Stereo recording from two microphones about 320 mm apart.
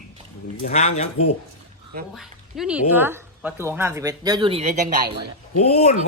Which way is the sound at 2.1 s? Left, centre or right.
Centre.